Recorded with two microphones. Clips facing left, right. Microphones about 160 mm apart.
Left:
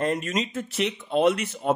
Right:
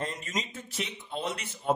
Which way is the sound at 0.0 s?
65° left (ahead or behind).